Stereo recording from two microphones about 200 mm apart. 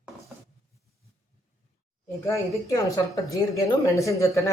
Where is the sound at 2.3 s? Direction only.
15° left (ahead or behind).